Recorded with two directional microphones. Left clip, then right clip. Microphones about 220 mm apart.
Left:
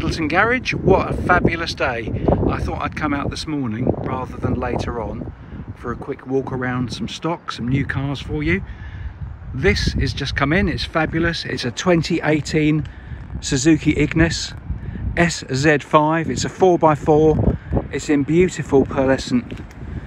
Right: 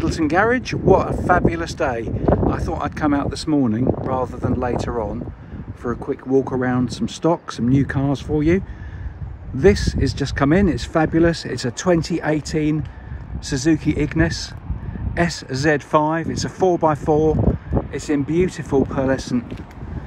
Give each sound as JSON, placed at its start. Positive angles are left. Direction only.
{"t": 0.0, "sound": "speech", "side_deg": -10}